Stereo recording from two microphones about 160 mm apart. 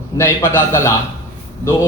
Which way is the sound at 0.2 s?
15° left (ahead or behind).